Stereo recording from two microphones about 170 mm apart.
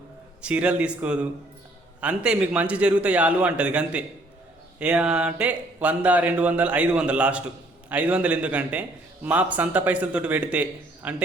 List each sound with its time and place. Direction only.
0.4 s speech: 10° right (ahead or behind)